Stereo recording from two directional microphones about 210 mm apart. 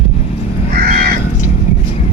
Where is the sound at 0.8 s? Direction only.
45° right (ahead or behind).